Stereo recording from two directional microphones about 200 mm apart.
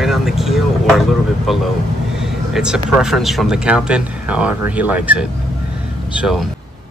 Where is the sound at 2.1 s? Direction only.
Centre (ahead or behind).